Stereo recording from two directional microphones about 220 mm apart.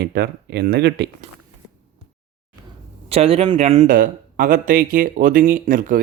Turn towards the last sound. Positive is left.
turn(degrees=-40)  # may be behind; listen again after turning